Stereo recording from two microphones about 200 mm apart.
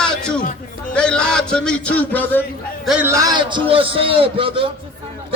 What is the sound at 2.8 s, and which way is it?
A man's voice, 5° right (ahead or behind).